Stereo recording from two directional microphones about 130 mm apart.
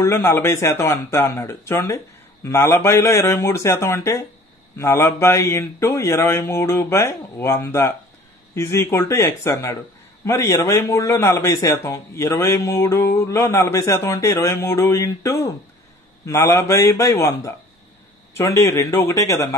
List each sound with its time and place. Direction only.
0.0 s a man's voice: 20° left (ahead or behind)